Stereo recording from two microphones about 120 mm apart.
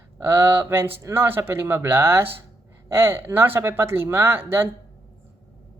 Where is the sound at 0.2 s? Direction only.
20° right (ahead or behind).